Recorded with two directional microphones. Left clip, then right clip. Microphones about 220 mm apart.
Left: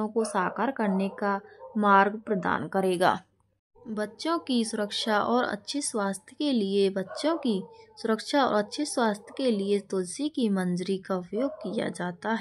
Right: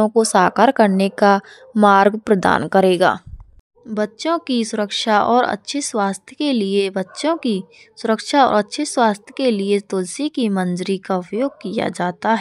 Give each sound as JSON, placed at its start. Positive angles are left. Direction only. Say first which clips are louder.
{"t": 0.0, "sound": "a woman's voice", "louder": "right 13 dB", "side_deg": -40}